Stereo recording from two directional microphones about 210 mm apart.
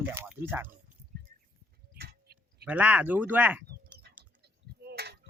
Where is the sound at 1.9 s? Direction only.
50° right (ahead or behind).